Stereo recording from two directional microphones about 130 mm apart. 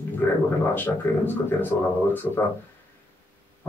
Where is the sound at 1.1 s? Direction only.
15° left (ahead or behind).